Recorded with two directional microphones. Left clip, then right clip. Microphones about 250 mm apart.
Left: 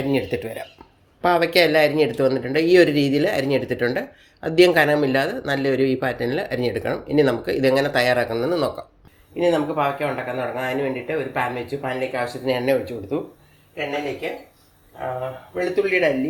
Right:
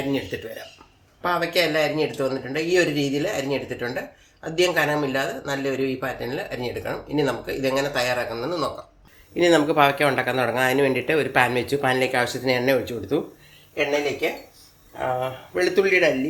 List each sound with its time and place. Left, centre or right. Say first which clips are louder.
0.1 s speech: left 4 dB; left
9.3 s speech: right 1 dB; right
9.7 s speech: right 4 dB; right
12.5 s speech: left 3 dB; centre
14.9 s speech: right 2 dB; right
15.7 s speech: even; centre